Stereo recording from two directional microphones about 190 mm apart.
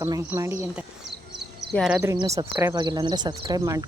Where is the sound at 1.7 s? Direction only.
Centre (ahead or behind).